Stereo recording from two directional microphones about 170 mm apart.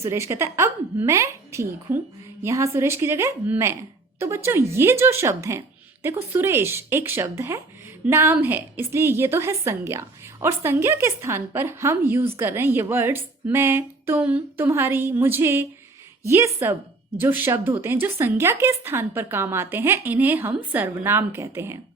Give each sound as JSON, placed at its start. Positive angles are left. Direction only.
{"t": 0.0, "sound": "a woman's voice", "side_deg": -15}